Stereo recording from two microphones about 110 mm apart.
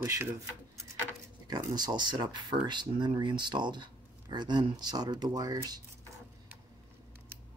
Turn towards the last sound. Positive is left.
turn(degrees=-35)  # may be behind; listen again after turning